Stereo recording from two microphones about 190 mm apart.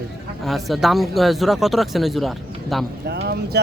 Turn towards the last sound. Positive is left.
turn(degrees=-55)  # may be behind; listen again after turning